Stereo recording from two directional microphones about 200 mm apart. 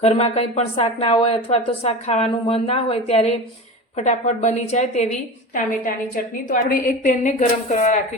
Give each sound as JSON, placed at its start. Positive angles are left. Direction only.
{"t": 0.0, "sound": "a woman's voice", "side_deg": 30}
{"t": 6.5, "sound": "a woman's voice", "side_deg": 40}